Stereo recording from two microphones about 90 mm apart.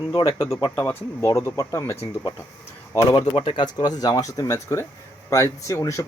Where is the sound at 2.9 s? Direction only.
40° left (ahead or behind).